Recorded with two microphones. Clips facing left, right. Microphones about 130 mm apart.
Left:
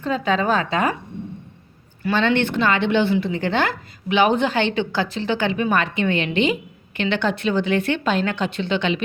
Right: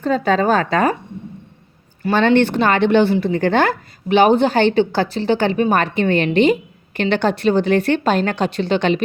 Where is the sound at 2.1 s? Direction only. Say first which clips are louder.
Right 5 dB; 40° right (ahead or behind).